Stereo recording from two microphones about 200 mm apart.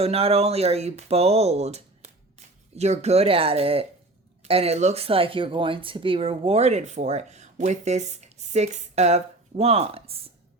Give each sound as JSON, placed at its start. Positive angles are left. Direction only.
{"t": 0.0, "sound": "speech", "side_deg": -30}